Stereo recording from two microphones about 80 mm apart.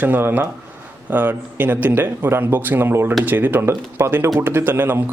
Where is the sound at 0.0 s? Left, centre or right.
Right.